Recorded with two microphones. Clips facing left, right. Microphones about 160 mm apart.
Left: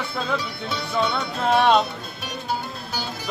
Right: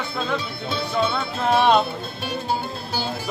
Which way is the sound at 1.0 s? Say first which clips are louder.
Even; centre (ahead or behind).